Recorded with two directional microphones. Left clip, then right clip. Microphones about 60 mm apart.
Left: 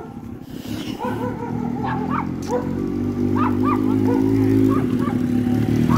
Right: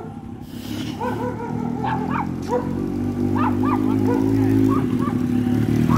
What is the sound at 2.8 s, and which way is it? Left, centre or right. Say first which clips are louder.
Music: left 1 dB; right.